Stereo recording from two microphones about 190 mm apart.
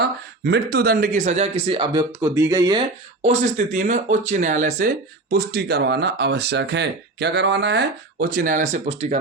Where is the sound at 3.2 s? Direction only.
40° right (ahead or behind).